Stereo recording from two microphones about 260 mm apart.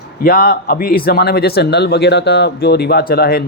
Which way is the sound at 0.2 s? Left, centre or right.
Left.